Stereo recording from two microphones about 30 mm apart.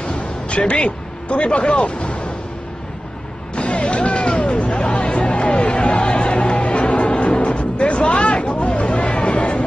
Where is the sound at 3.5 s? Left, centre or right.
Left.